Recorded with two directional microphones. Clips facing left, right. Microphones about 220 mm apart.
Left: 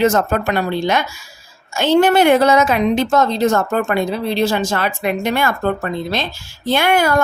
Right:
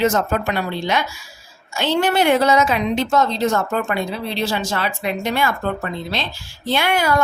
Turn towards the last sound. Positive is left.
turn(degrees=50)  # may be behind; listen again after turning